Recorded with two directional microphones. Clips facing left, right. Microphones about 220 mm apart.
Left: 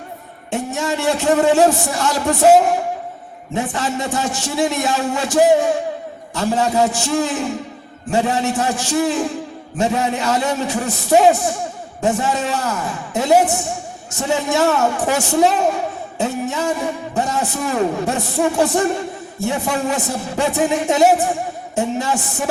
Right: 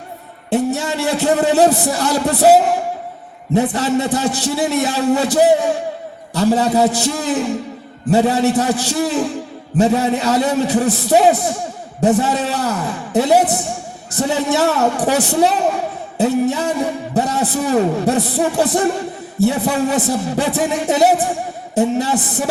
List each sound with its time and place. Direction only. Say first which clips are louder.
0.5 s a man's voice: right 4 dB; 35° right (ahead or behind)